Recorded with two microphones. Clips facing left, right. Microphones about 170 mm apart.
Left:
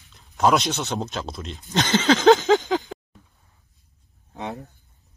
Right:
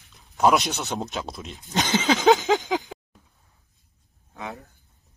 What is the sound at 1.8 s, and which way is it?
Speech, 15° right (ahead or behind).